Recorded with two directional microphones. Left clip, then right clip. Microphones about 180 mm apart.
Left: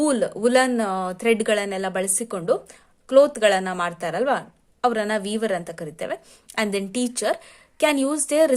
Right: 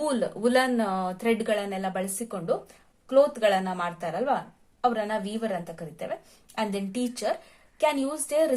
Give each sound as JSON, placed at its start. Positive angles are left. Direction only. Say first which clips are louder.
{"t": 0.0, "sound": "a woman's voice", "louder": "left 5 dB", "side_deg": 35}